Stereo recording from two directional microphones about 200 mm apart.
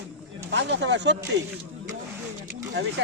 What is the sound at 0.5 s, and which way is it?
Speech, 60° right (ahead or behind).